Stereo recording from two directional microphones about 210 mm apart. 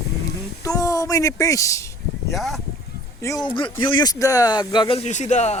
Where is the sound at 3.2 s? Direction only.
20° left (ahead or behind).